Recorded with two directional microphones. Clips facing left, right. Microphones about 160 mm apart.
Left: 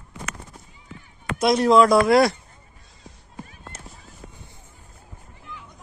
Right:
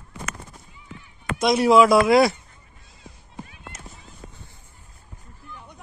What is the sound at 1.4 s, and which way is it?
Speech, 5° right (ahead or behind).